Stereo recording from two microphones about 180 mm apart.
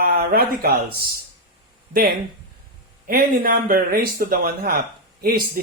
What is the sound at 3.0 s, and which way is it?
Speech, 50° right (ahead or behind).